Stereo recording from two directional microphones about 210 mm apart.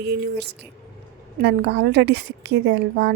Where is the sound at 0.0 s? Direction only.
50° right (ahead or behind).